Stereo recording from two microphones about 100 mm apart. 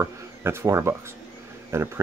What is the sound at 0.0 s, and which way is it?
Speech, 25° right (ahead or behind).